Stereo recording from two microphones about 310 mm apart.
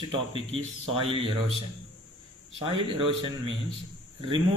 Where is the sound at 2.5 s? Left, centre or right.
Centre.